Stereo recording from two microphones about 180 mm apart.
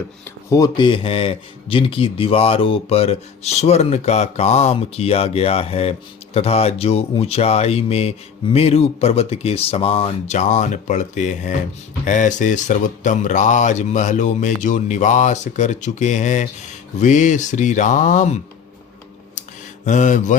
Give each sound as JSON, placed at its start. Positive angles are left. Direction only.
{"t": 0.5, "sound": "speech", "side_deg": 20}
{"t": 19.4, "sound": "mantra", "side_deg": 40}